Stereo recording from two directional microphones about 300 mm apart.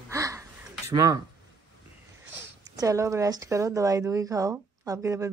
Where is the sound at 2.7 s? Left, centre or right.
Centre.